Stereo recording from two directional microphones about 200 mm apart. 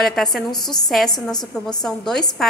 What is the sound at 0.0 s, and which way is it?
A woman's voice, centre (ahead or behind).